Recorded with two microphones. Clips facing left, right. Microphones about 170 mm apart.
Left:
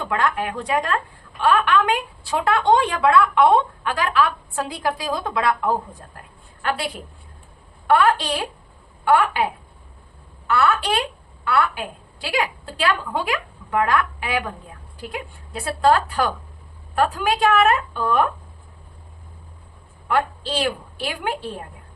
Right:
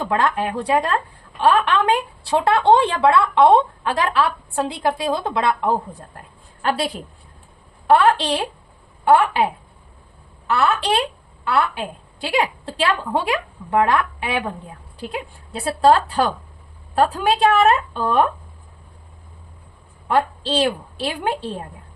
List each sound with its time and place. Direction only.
0.0 s a woman's voice: 30° right (ahead or behind)
20.1 s a woman's voice: 30° right (ahead or behind)